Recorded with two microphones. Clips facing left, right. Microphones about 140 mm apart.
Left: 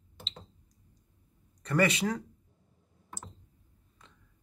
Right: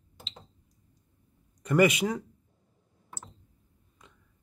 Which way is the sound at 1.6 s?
15° right (ahead or behind).